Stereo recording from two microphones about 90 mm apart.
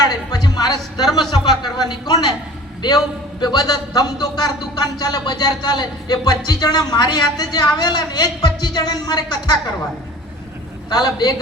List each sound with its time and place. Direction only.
0.0 s a woman's voice: 50° left (ahead or behind)
3.4 s a man's voice: 45° left (ahead or behind)
10.8 s a man's voice: 50° left (ahead or behind)